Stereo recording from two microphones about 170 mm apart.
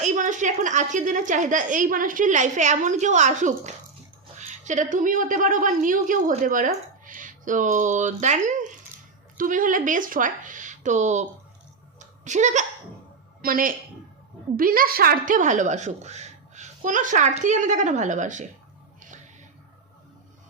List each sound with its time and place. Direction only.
0.0 s a woman's voice: 45° right (ahead or behind)
11.9 s a sound: 45° right (ahead or behind)
13.4 s a woman's voice: 55° right (ahead or behind)